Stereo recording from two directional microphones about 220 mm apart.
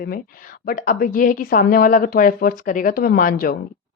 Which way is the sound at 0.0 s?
45° left (ahead or behind).